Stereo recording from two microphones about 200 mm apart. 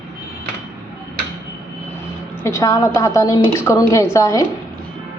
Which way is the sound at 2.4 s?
15° left (ahead or behind).